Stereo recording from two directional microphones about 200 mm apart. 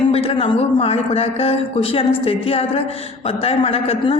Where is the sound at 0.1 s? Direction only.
30° left (ahead or behind).